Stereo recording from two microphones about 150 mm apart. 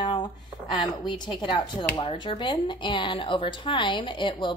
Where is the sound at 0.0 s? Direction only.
30° left (ahead or behind).